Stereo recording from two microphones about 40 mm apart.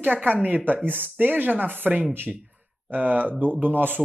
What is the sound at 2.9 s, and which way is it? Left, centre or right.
Speech, right.